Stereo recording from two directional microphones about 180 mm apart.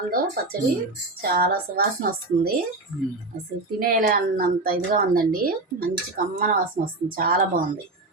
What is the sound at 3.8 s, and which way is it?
A woman's voice, 50° right (ahead or behind).